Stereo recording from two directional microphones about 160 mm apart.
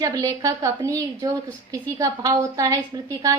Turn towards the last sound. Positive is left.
turn(degrees=-20)  # may be behind; listen again after turning